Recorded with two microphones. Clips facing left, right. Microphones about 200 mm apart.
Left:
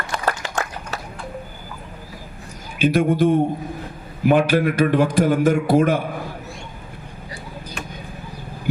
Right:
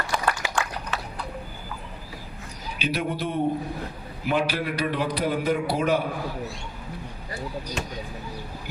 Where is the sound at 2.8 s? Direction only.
50° left (ahead or behind).